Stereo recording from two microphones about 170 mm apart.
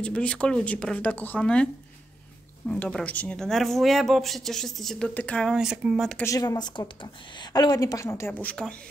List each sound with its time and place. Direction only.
0.0 s speech: 5° left (ahead or behind)
2.7 s speech: 5° left (ahead or behind)
6.2 s a woman's voice: 20° left (ahead or behind)